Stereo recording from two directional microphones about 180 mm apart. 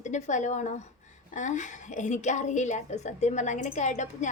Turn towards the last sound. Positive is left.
turn(degrees=40)  # may be behind; listen again after turning